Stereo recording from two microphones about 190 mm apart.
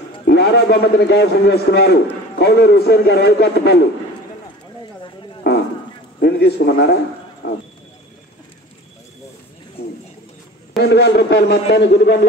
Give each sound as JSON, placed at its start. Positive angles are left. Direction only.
{"t": 0.3, "sound": "a man's voice", "side_deg": 60}
{"t": 5.4, "sound": "dog", "side_deg": 60}
{"t": 6.2, "sound": "a man's voice", "side_deg": 60}
{"t": 10.8, "sound": "a man's voice", "side_deg": 65}